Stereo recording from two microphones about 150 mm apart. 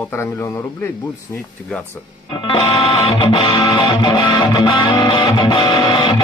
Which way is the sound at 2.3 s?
35° left (ahead or behind).